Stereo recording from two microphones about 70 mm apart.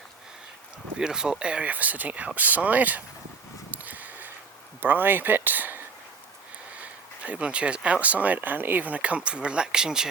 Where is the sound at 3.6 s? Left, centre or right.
Right.